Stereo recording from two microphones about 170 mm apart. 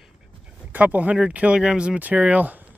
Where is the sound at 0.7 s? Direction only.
10° right (ahead or behind).